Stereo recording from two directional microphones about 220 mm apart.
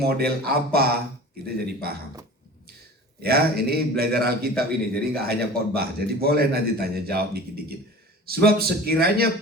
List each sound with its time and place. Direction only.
0.0 s a man's voice: 45° right (ahead or behind)
3.2 s a man's voice: 45° right (ahead or behind)